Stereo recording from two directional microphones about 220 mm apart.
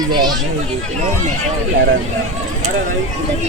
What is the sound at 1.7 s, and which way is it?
Speech, 55° right (ahead or behind).